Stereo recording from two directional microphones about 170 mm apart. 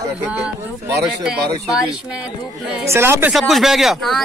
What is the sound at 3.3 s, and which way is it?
Speech, centre (ahead or behind).